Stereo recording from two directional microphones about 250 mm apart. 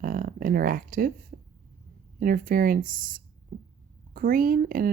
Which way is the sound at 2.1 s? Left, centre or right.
Right.